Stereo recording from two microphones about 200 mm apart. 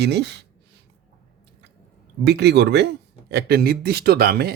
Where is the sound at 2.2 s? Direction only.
55° right (ahead or behind).